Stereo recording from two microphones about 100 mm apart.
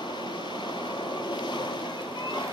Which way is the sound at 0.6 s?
50° left (ahead or behind).